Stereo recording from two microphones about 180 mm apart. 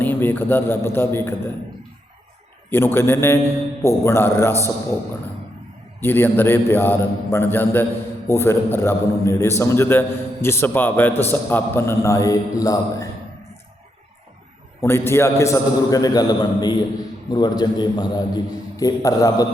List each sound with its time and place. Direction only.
0.0 s a man's voice: 10° left (ahead or behind)
2.6 s a man's voice: 10° left (ahead or behind)
6.0 s a man's voice: 10° left (ahead or behind)
14.8 s a man's voice: 15° left (ahead or behind)